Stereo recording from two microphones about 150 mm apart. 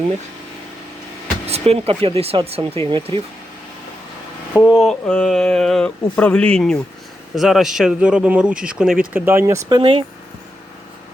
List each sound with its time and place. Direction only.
1.5 s speech: 45° right (ahead or behind)
4.7 s speech: centre (ahead or behind)
9.6 s speech: 30° right (ahead or behind)